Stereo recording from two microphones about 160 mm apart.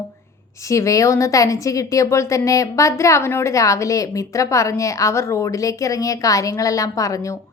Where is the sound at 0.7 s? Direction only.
20° left (ahead or behind).